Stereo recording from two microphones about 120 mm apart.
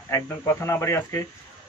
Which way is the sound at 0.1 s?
20° left (ahead or behind).